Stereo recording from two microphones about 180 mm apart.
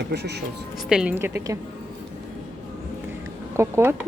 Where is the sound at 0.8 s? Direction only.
5° right (ahead or behind).